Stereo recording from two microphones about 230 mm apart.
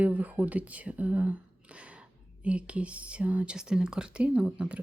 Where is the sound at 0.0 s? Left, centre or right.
Centre.